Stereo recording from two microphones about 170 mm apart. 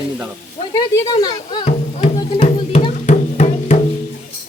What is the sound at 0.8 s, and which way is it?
Speech, 25° left (ahead or behind).